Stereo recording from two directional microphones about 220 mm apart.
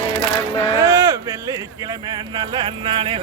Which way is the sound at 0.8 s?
15° right (ahead or behind).